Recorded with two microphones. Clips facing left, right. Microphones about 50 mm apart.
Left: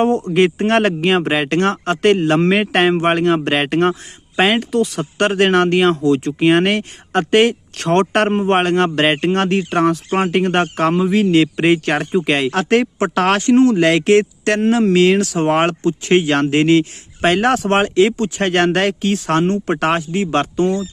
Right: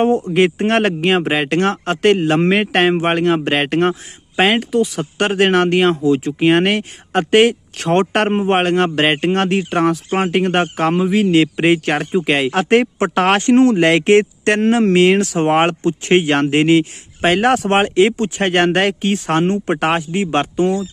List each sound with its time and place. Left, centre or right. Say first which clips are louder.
0.7 s speech: even; centre; by 14.6 s right
14.6 s speech: even; right
16.5 s speech: even; centre
17.6 s speech: even; right